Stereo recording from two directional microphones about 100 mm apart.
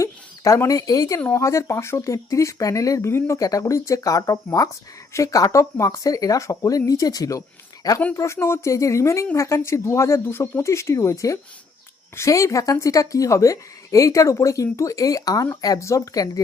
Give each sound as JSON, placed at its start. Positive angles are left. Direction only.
{"t": 0.0, "sound": "a woman's voice", "side_deg": 30}